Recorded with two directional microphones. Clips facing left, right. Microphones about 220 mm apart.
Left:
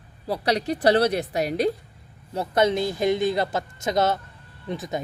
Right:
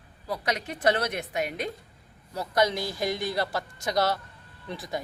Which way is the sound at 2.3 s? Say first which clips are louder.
Left 4 dB; 25° left (ahead or behind).